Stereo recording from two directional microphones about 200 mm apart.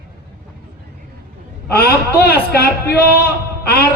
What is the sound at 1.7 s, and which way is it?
A man's voice, 50° left (ahead or behind).